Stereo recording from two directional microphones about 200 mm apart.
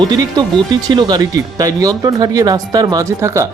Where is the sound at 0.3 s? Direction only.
20° right (ahead or behind).